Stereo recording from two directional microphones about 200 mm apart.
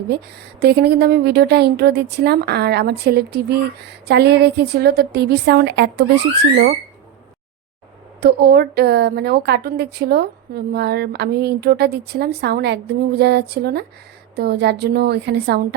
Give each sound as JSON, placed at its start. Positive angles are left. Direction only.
{"t": 0.1, "sound": "a woman's voice", "side_deg": -55}
{"t": 8.2, "sound": "a woman's voice", "side_deg": -55}